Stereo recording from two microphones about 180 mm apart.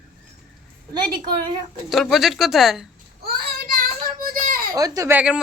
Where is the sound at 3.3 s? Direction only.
55° right (ahead or behind).